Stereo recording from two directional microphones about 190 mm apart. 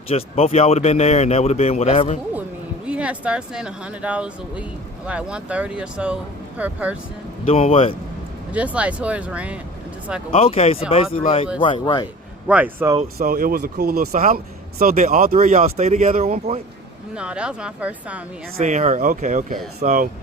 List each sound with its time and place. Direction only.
0.1 s speech: 30° left (ahead or behind)
2.8 s speech: 5° right (ahead or behind)
7.4 s speech: 30° left (ahead or behind)
8.5 s speech: 5° right (ahead or behind)
10.3 s speech: 30° left (ahead or behind)
12.5 s speech: 10° right (ahead or behind)
13.1 s speech: 50° right (ahead or behind)
17.2 s speech: 5° right (ahead or behind)
18.5 s speech: 40° right (ahead or behind)